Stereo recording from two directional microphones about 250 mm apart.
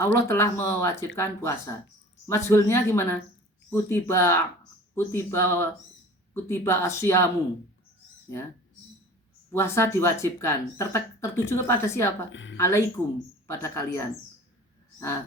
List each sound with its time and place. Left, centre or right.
0.0 s speech: centre
9.5 s speech: centre
12.3 s speech: left
12.5 s speech: centre